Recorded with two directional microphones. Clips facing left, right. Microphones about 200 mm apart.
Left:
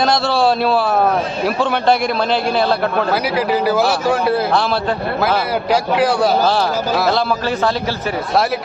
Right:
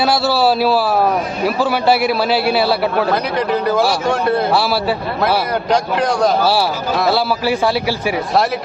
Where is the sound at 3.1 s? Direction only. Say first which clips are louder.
Even; 5° left (ahead or behind).